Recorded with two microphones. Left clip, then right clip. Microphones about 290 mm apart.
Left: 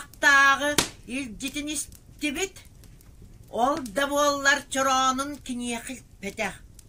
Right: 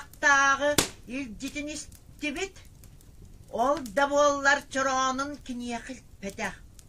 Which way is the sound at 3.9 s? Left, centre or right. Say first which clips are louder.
Right 1 dB; right.